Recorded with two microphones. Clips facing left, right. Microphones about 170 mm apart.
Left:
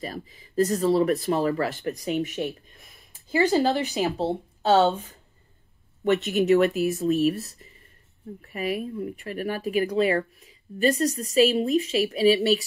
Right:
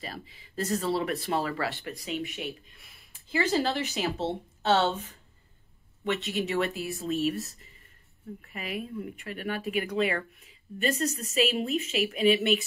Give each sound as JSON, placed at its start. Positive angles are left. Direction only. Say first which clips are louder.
{"t": 0.0, "sound": "speech", "louder": "left 6 dB", "side_deg": 45}
{"t": 6.0, "sound": "speech", "louder": "left 9 dB", "side_deg": 50}